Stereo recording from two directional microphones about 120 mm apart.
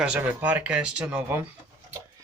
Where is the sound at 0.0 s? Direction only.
10° right (ahead or behind).